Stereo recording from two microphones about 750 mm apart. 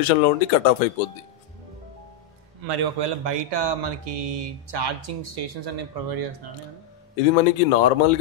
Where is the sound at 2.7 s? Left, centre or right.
Right.